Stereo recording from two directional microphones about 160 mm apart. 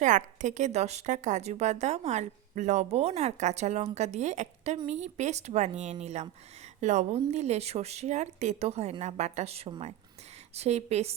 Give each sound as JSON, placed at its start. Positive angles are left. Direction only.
{"t": 0.0, "sound": "a woman's voice", "side_deg": -50}